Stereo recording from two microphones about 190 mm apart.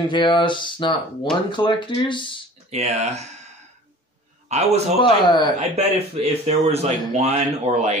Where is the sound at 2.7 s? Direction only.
35° right (ahead or behind).